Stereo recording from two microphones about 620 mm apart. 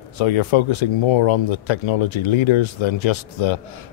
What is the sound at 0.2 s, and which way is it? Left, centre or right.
Speech, left.